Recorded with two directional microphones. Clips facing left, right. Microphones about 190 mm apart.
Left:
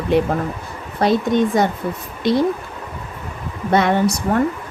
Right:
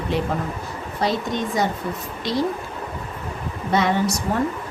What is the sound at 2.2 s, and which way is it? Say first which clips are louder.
Speech: left 7 dB; 55° left (ahead or behind).